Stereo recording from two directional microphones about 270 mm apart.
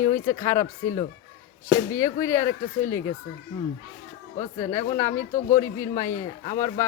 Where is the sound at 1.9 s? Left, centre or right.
Centre.